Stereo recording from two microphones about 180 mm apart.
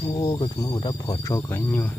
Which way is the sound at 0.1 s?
25° left (ahead or behind).